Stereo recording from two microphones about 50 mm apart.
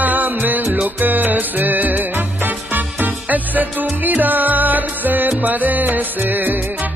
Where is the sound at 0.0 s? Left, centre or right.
Right.